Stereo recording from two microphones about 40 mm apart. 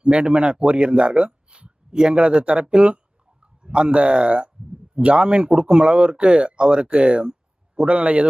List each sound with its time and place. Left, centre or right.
0.0 s a man's voice: right